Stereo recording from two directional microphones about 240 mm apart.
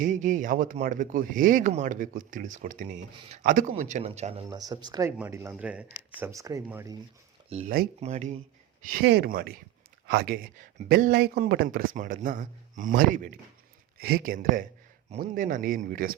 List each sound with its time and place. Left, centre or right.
0.0 s speech: right
4.4 s speech: centre
7.5 s speech: right
8.9 s speech: right